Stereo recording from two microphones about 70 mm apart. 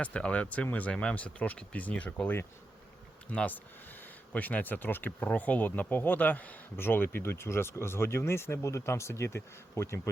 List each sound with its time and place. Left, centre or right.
0.0 s speech: centre; by 10.0 s left